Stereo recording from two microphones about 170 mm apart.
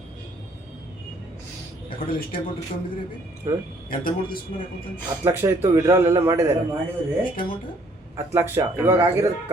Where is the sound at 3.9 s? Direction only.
55° left (ahead or behind).